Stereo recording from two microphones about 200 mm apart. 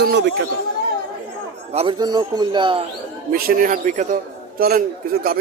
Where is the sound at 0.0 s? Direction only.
55° right (ahead or behind).